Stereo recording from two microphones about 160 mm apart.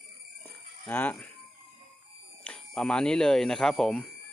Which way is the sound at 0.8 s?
10° left (ahead or behind).